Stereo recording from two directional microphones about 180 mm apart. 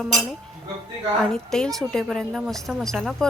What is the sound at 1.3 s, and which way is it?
A woman's voice, centre (ahead or behind).